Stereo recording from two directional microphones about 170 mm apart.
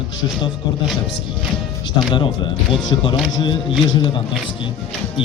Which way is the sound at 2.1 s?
30° left (ahead or behind).